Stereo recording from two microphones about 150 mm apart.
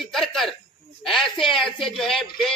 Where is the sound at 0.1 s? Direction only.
Centre (ahead or behind).